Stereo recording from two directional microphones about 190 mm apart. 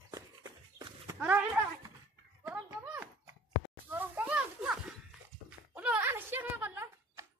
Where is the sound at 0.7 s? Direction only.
10° right (ahead or behind).